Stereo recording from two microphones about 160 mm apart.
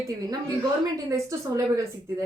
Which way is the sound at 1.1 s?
20° right (ahead or behind).